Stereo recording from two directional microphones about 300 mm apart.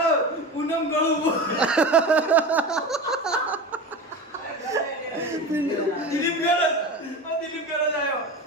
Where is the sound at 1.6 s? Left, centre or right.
Centre.